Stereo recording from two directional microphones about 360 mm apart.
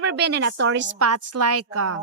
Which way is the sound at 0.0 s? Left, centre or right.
Right.